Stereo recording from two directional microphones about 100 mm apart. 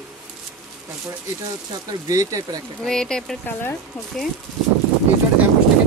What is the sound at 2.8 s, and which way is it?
Speech, 5° left (ahead or behind).